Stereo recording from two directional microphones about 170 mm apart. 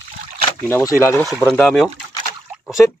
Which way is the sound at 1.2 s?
Centre (ahead or behind).